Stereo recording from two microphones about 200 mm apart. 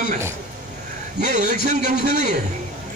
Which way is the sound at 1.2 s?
40° right (ahead or behind).